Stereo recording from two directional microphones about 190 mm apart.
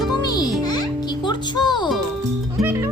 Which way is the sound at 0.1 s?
20° left (ahead or behind).